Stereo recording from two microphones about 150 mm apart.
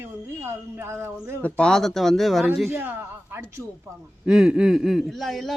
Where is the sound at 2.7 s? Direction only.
15° right (ahead or behind).